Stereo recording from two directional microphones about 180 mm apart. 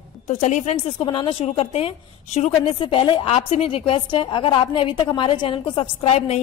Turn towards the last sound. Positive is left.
turn(degrees=35)  # may be behind; listen again after turning